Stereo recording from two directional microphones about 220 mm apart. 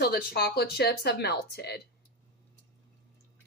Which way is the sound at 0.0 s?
45° left (ahead or behind).